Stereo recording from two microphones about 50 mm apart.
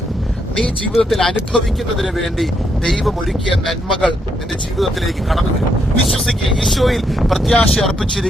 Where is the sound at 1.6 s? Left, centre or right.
Centre.